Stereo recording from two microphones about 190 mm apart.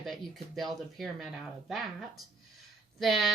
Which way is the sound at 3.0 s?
Centre (ahead or behind).